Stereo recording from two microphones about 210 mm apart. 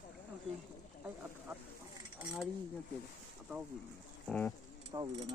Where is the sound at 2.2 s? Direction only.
Centre (ahead or behind).